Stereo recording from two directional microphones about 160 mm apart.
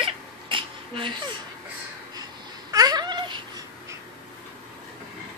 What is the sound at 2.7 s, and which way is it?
Cat, 25° right (ahead or behind).